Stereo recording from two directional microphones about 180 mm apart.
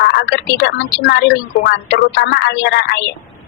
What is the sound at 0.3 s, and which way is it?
Speech, 75° left (ahead or behind).